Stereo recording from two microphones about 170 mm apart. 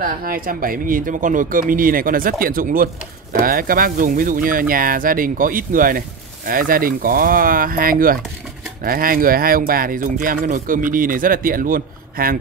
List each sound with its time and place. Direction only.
0.0 s speech: 55° right (ahead or behind)